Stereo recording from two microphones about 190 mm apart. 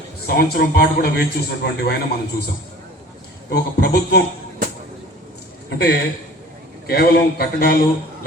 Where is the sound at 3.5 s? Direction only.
60° left (ahead or behind).